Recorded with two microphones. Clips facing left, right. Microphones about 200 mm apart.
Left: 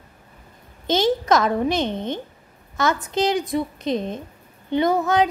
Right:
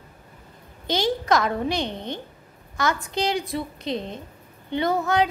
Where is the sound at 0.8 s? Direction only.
20° left (ahead or behind).